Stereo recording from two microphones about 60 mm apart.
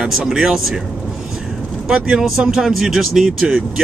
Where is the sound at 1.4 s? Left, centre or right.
Centre.